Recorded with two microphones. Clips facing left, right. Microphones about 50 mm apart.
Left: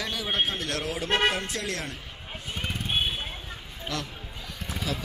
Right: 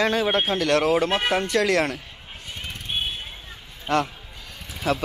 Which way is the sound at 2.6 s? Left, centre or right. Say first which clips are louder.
Left 1 dB; centre.